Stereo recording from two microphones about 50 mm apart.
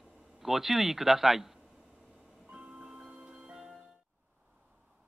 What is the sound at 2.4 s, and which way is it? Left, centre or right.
Music, centre.